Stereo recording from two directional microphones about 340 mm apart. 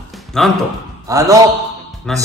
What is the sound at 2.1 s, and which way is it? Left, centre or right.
Speech, centre.